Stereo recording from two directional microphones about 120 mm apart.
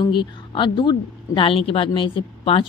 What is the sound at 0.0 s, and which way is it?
A woman's voice, 40° left (ahead or behind).